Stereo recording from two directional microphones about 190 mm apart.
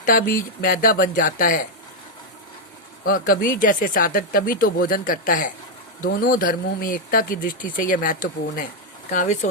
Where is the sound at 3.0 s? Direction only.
50° left (ahead or behind).